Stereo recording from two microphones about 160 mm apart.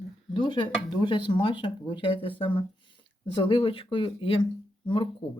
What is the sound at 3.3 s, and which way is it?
Speech, 35° left (ahead or behind).